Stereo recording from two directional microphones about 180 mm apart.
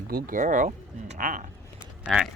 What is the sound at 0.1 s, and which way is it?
Speech, 55° right (ahead or behind).